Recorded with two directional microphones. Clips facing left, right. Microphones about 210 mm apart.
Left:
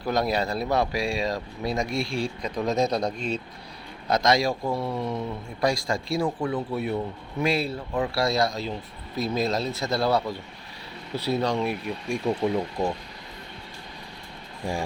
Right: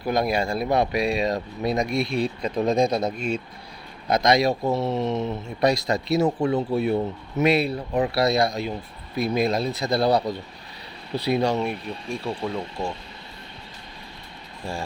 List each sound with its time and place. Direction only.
0.0 s speech: 10° right (ahead or behind)
2.6 s a man's voice: 15° right (ahead or behind)
11.6 s speech: 5° left (ahead or behind)
14.6 s speech: 15° left (ahead or behind)